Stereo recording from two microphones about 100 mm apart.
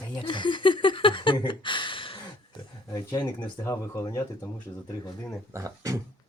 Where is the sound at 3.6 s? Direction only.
30° left (ahead or behind).